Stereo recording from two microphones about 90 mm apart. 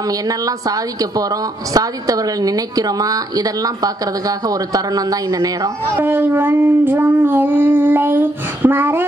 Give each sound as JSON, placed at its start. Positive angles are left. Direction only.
{"t": 0.3, "sound": "a woman's voice", "side_deg": -40}
{"t": 5.9, "sound": "child singing", "side_deg": -25}